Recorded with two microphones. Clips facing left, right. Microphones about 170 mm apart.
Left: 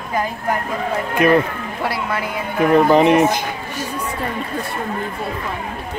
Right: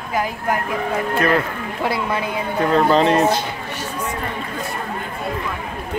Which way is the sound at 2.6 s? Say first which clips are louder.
Left 3 dB; 15° left (ahead or behind).